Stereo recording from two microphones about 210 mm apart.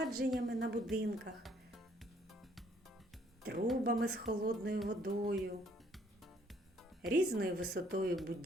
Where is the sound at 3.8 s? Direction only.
50° right (ahead or behind).